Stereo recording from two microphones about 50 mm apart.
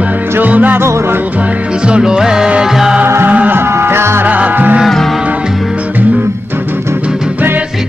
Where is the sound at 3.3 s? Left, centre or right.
Right.